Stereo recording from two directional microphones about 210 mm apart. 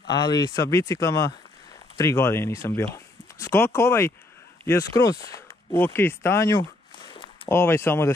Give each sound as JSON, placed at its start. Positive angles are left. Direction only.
{"t": 0.1, "sound": "speech", "side_deg": 20}
{"t": 7.0, "sound": "zipper", "side_deg": 20}
{"t": 7.4, "sound": "speech", "side_deg": 10}